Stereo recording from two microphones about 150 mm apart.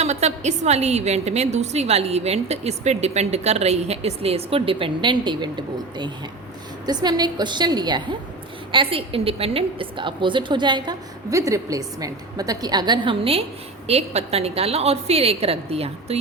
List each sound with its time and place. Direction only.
0.0 s a woman's voice: 50° right (ahead or behind); by 5.5 s 30° right (ahead or behind)
6.8 s a woman's voice: 30° right (ahead or behind)